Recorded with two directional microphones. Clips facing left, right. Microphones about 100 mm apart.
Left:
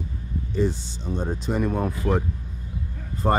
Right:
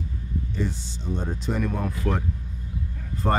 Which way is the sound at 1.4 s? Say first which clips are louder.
Left 3 dB; 25° left (ahead or behind).